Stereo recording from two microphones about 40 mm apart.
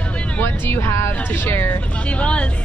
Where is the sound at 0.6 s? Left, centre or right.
Left.